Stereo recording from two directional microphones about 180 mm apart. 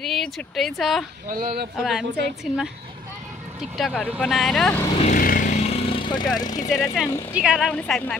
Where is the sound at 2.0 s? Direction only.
70° right (ahead or behind).